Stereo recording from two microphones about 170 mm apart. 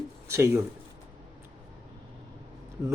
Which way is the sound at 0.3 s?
15° right (ahead or behind).